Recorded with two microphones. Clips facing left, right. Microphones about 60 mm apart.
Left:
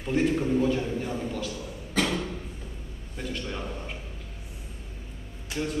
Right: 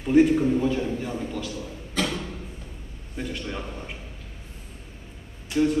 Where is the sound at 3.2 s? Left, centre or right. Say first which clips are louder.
Right 2 dB; centre.